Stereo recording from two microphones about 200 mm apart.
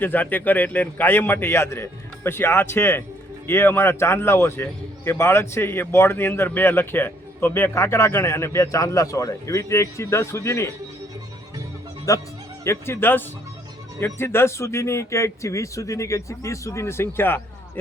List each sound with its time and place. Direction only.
0.0 s a man's voice: 10° left (ahead or behind)
12.1 s a man's voice: 15° left (ahead or behind)